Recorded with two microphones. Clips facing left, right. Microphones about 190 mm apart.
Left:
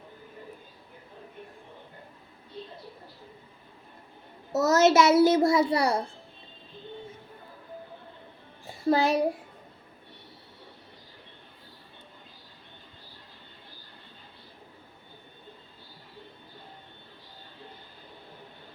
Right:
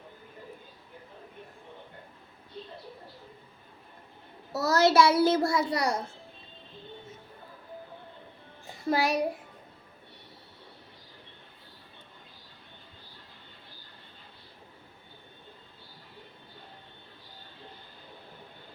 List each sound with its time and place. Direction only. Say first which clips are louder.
4.5 s a child's voice: left 2 dB; 20° left (ahead or behind)
8.9 s a child's voice: left 4 dB; 30° left (ahead or behind)